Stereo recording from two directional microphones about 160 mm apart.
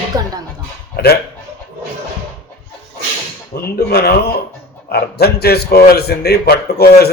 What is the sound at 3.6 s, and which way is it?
A man's voice, 80° left.